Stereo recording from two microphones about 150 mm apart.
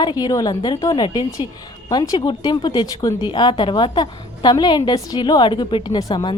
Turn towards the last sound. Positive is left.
turn(degrees=25)  # may be behind; listen again after turning